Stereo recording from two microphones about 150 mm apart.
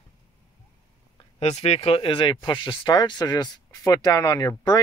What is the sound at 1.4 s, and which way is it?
Speech, 45° left (ahead or behind).